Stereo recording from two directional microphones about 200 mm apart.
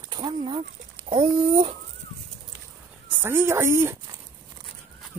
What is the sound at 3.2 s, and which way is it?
Speech, 10° right (ahead or behind).